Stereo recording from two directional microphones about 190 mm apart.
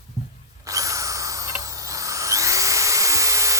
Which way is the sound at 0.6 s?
15° right (ahead or behind).